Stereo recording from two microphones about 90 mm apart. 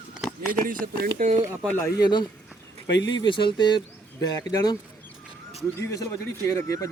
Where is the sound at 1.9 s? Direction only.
50° left (ahead or behind).